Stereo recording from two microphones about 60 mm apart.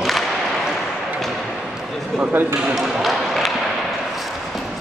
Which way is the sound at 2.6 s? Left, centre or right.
Centre.